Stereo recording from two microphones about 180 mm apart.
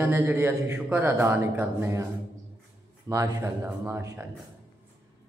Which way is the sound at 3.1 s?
15° right (ahead or behind).